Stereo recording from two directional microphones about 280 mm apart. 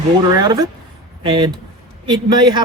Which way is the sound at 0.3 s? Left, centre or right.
Centre.